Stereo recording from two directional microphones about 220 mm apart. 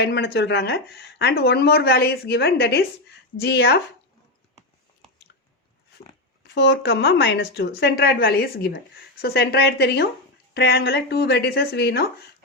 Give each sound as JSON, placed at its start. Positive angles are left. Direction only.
{"t": 0.0, "sound": "speech", "side_deg": 50}
{"t": 6.5, "sound": "speech", "side_deg": 50}